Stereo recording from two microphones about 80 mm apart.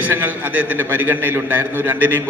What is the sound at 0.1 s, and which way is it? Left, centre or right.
A man's voice, right.